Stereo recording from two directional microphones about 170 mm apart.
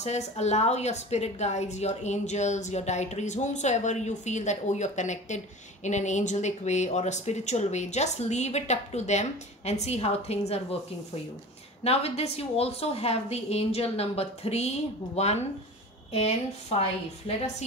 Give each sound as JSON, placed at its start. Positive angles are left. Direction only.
{"t": 0.0, "sound": "a woman's voice", "side_deg": 40}
{"t": 11.8, "sound": "speech", "side_deg": 35}